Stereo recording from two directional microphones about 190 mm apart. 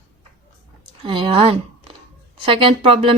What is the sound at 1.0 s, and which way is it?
Speech, 25° right (ahead or behind).